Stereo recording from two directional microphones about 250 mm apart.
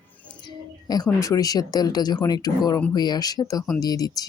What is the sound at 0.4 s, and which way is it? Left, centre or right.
Speech, centre.